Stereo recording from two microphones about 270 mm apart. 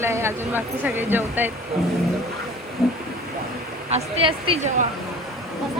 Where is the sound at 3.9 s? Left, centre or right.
Right.